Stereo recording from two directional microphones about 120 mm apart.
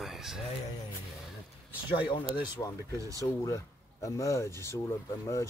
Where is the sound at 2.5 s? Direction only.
30° left (ahead or behind).